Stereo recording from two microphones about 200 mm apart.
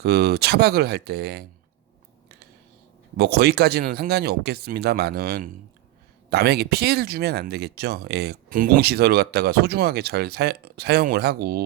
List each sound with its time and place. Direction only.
0.0 s speech: 55° right (ahead or behind)
3.2 s speech: 55° right (ahead or behind)